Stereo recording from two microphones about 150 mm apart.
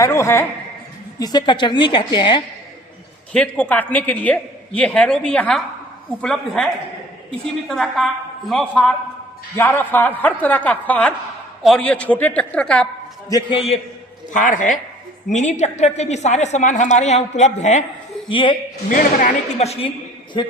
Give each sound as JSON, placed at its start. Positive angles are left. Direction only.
{"t": 0.0, "sound": "a woman's voice", "side_deg": 20}
{"t": 1.2, "sound": "a woman's voice", "side_deg": 30}
{"t": 3.3, "sound": "a man's voice", "side_deg": 10}
{"t": 7.7, "sound": "a woman's voice", "side_deg": 0}
{"t": 9.6, "sound": "a man's voice", "side_deg": 15}
{"t": 13.2, "sound": "a woman's voice", "side_deg": 25}
{"t": 14.3, "sound": "a woman's voice", "side_deg": 60}
{"t": 18.3, "sound": "a woman's voice", "side_deg": 35}
{"t": 18.9, "sound": "a woman's voice", "side_deg": 60}
{"t": 19.5, "sound": "a woman's voice", "side_deg": 45}